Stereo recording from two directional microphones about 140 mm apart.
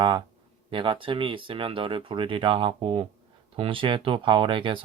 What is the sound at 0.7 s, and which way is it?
Speech, 35° right (ahead or behind).